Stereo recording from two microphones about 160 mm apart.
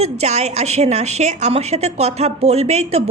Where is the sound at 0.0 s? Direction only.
45° right (ahead or behind).